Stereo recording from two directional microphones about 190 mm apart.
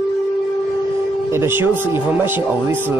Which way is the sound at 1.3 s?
10° right (ahead or behind).